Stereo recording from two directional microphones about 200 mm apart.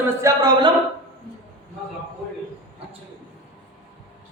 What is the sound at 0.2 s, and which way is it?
Speech, 15° right (ahead or behind).